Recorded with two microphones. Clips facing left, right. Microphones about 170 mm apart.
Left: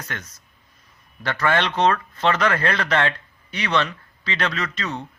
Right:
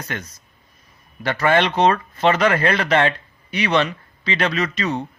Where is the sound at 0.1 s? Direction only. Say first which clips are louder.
Right 5 dB; 15° right (ahead or behind).